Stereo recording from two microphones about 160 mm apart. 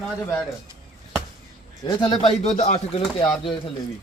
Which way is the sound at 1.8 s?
30° left (ahead or behind).